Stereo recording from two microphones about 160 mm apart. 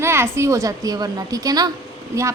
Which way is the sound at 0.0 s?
15° right (ahead or behind).